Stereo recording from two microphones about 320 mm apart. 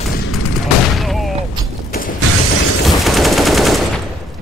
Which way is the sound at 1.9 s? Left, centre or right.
Left.